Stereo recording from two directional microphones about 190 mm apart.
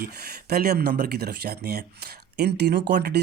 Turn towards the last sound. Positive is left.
turn(degrees=-60)  # may be behind; listen again after turning